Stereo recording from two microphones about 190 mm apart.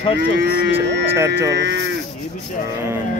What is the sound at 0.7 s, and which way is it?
Speech, 10° right (ahead or behind).